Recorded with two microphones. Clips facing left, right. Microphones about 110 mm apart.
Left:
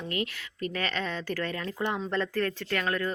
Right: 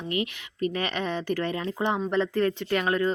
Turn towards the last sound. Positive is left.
turn(degrees=-20)  # may be behind; listen again after turning